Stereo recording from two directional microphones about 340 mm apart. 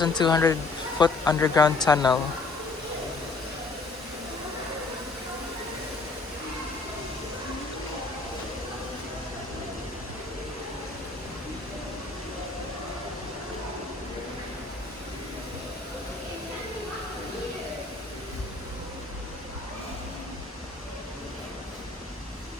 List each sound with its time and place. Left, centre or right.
0.0 s speech: centre